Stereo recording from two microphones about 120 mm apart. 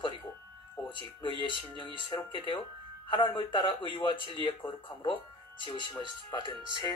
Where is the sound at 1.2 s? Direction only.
45° left (ahead or behind).